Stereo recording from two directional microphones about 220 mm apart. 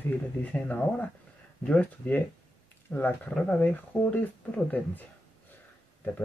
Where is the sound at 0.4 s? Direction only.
5° left (ahead or behind).